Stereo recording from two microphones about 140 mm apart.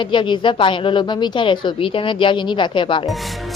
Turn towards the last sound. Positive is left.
turn(degrees=35)  # may be behind; listen again after turning